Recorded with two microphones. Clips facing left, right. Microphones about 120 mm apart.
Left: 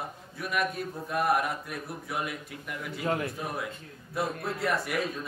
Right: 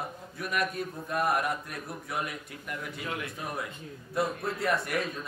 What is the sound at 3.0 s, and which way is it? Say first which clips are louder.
Speech: left 8 dB; 35° left (ahead or behind).